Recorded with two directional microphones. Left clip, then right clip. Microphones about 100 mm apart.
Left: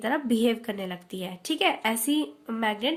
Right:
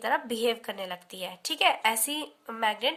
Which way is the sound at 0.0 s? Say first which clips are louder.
Left 1 dB; 20° right (ahead or behind).